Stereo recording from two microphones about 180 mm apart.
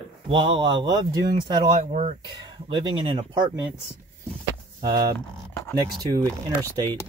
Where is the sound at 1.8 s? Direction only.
40° right (ahead or behind).